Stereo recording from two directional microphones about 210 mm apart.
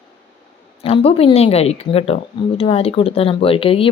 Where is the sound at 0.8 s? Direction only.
25° left (ahead or behind).